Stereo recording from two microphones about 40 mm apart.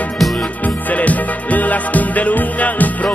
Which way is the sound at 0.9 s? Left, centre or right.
Left.